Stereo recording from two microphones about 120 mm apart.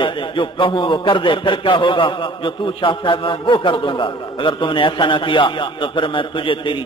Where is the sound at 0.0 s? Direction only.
45° left (ahead or behind).